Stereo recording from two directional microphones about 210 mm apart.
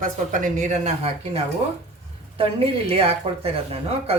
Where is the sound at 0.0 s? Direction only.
35° right (ahead or behind).